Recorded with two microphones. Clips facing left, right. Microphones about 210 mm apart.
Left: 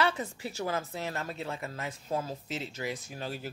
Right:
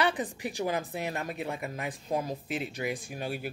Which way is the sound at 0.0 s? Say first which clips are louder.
Right 1 dB; 15° right (ahead or behind).